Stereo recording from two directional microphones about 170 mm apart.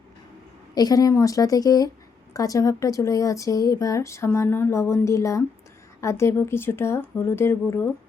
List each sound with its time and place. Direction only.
0.7 s a woman's voice: 20° left (ahead or behind)